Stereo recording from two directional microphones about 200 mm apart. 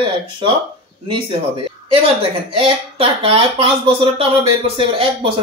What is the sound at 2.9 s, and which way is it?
Speech, 25° right (ahead or behind).